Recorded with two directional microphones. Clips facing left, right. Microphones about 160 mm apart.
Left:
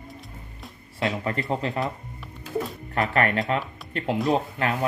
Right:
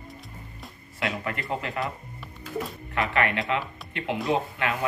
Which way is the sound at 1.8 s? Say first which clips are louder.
Left 2 dB; centre (ahead or behind).